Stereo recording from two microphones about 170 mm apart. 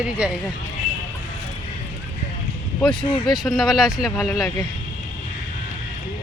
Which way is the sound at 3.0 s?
30° left (ahead or behind).